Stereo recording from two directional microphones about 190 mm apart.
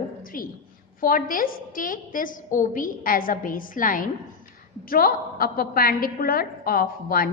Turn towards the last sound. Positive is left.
turn(degrees=50)  # may be behind; listen again after turning